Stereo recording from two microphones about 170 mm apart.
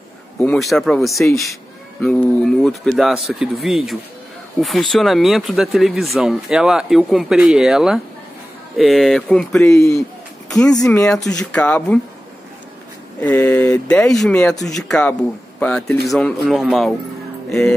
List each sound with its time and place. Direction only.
0.4 s speech: centre (ahead or behind)
9.7 s speech: 20° left (ahead or behind)
10.9 s speech: 5° left (ahead or behind)
13.2 s speech: 10° left (ahead or behind)